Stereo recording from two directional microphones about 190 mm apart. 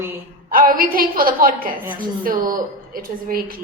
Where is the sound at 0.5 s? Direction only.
50° right (ahead or behind).